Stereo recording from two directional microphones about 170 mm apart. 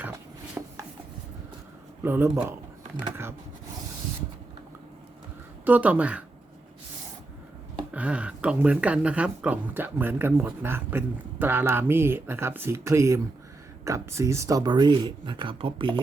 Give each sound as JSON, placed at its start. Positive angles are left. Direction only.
{"t": 0.6, "sound": "chopping", "side_deg": -15}
{"t": 2.0, "sound": "speech", "side_deg": -15}
{"t": 5.6, "sound": "speech", "side_deg": -10}
{"t": 7.9, "sound": "speech", "side_deg": -10}